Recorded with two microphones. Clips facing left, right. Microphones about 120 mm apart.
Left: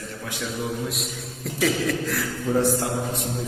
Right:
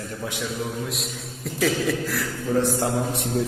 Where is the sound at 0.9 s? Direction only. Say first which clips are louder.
Left 1 dB; centre (ahead or behind).